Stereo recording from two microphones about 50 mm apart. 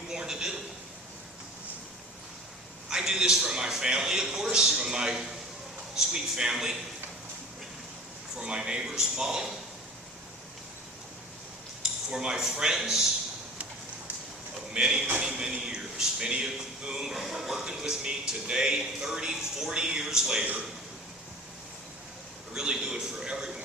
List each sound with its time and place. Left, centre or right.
0.1 s a sound: centre
2.9 s speech: centre
8.4 s speech: centre
11.8 s speech: centre
14.7 s speech: centre
22.5 s speech: centre